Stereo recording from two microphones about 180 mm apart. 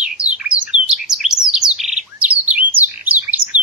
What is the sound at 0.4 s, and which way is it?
Bird, 5° right (ahead or behind).